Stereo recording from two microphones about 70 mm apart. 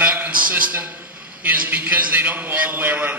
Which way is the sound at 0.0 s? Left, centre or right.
Right.